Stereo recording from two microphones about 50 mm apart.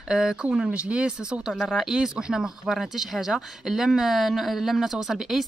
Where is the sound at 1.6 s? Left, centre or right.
Centre.